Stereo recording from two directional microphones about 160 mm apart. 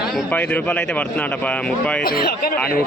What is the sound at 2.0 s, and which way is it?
Speech, 70° left (ahead or behind).